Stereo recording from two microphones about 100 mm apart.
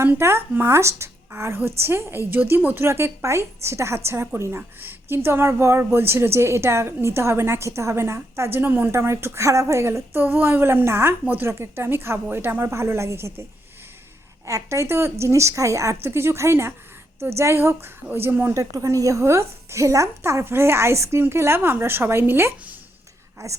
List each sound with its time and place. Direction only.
0.0 s a woman's voice: 25° right (ahead or behind)
14.4 s a woman's voice: 30° right (ahead or behind)
18.5 s a woman's voice: 35° right (ahead or behind)
23.4 s a woman's voice: 30° right (ahead or behind)